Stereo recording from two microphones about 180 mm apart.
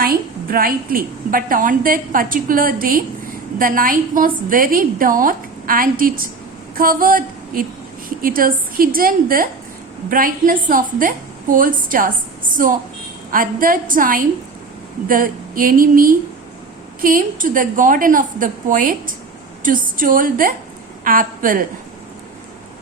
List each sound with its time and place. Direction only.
0.0 s a woman's voice: 55° right (ahead or behind)